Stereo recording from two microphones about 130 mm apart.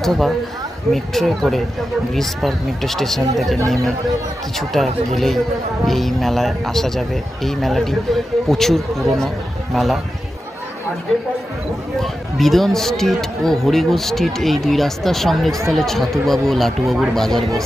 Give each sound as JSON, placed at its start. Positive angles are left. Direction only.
{"t": 0.0, "sound": "a man's voice", "side_deg": 0}
{"t": 12.0, "sound": "speech", "side_deg": 0}